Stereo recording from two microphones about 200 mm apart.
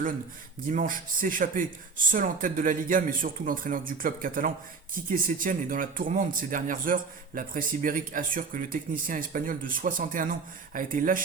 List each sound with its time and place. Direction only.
0.7 s a man's voice: 40° right (ahead or behind)